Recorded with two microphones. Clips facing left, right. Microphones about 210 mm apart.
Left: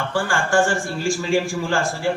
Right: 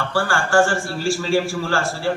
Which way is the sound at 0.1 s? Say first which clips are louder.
Right 2 dB; 15° left (ahead or behind).